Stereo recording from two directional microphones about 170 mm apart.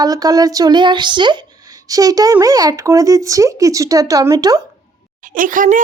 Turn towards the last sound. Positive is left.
turn(degrees=-50)  # may be behind; listen again after turning